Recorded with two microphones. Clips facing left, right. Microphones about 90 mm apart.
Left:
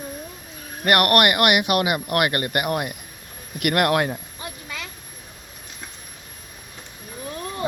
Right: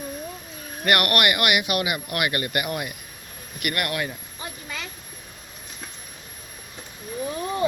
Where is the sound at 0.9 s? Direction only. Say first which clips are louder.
Left 4 dB; 40° left (ahead or behind).